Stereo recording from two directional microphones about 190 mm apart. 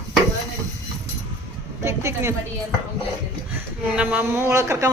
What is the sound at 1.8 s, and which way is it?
Speech, 15° right (ahead or behind).